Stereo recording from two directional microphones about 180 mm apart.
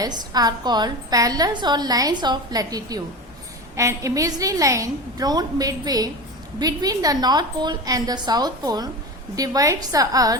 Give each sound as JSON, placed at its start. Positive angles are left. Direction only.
{"t": 0.0, "sound": "a woman's voice", "side_deg": -20}